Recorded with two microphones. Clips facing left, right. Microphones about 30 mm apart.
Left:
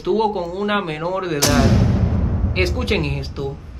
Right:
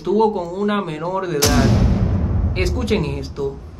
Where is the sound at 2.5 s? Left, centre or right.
Left.